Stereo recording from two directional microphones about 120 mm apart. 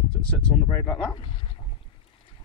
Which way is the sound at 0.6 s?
20° left (ahead or behind).